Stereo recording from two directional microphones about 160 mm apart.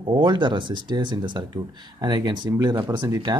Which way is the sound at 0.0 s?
30° right (ahead or behind).